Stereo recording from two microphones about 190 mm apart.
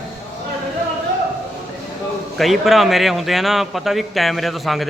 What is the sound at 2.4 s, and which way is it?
Speech, centre (ahead or behind).